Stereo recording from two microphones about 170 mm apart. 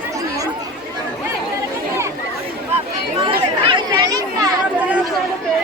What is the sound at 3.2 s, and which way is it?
Chatter, 30° right (ahead or behind).